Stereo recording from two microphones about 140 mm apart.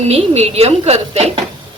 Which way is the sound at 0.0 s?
50° right (ahead or behind).